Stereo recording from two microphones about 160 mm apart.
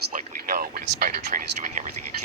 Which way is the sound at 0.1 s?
55° right (ahead or behind).